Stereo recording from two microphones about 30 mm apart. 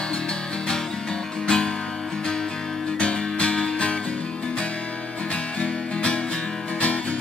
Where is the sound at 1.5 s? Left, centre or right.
Left.